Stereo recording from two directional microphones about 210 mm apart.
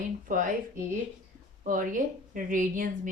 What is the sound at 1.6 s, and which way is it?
A woman's voice, 40° right (ahead or behind).